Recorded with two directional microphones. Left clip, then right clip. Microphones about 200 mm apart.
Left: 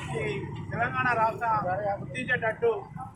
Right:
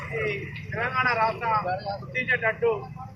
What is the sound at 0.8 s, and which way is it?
Speech, 15° left (ahead or behind).